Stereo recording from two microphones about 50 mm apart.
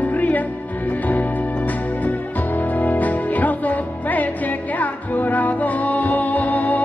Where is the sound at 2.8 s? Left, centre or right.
Left.